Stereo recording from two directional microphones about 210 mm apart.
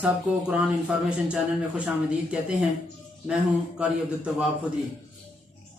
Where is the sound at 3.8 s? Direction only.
5° right (ahead or behind).